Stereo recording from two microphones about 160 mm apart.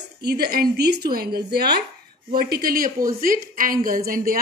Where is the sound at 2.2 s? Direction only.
70° right (ahead or behind).